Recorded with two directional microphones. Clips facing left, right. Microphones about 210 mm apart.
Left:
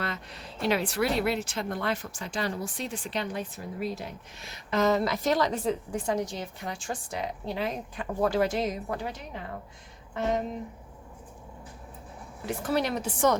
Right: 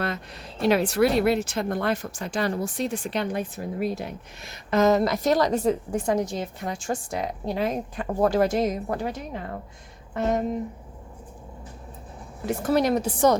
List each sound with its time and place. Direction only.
0.7 s a woman's voice: 45° right (ahead or behind)
4.7 s a woman's voice: 45° right (ahead or behind)
12.5 s a woman's voice: 45° right (ahead or behind)